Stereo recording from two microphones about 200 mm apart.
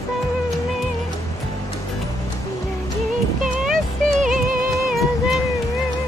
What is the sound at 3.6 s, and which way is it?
Music, centre (ahead or behind).